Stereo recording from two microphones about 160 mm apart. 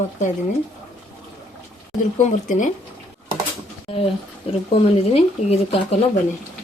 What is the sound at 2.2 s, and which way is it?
Speech, 50° left (ahead or behind).